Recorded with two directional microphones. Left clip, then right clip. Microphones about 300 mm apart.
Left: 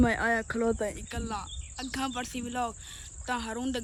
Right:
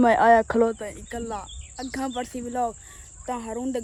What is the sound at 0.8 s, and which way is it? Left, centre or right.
Speech, left.